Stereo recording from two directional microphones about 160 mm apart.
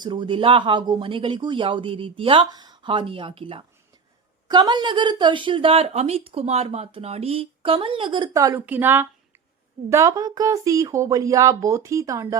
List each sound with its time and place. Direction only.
0.0 s a woman's voice: 30° right (ahead or behind)
8.3 s a woman's voice: 20° right (ahead or behind)